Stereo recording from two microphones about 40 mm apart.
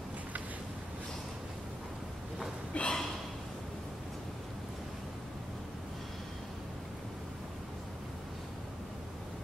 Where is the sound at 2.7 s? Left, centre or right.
Left.